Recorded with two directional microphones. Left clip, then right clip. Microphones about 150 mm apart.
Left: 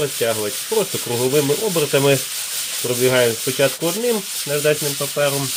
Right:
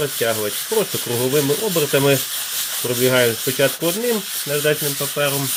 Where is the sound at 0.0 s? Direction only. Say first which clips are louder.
Even; 5° right (ahead or behind).